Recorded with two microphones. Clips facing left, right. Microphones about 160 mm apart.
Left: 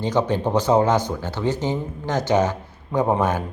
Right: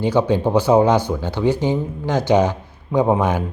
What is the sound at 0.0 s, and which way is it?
Speech, 10° right (ahead or behind).